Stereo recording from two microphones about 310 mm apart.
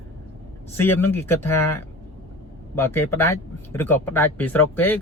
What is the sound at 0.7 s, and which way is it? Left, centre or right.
Speech, centre.